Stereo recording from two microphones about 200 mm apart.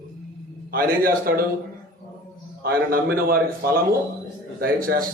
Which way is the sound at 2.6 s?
50° right (ahead or behind).